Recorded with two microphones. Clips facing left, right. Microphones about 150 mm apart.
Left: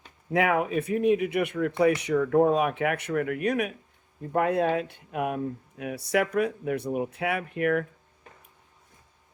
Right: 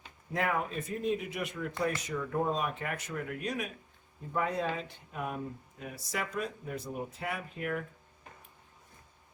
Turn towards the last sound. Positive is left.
turn(degrees=70)  # may be behind; listen again after turning